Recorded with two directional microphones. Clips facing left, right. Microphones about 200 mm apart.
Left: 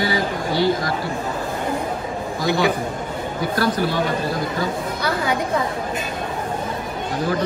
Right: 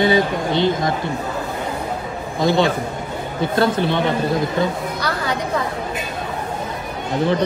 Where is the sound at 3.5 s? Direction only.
25° right (ahead or behind).